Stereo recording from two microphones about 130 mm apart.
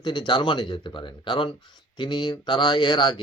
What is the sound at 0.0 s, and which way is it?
Speech, 35° left (ahead or behind).